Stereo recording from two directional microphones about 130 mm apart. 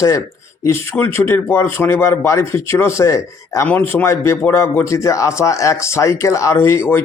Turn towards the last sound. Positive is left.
turn(degrees=20)  # may be behind; listen again after turning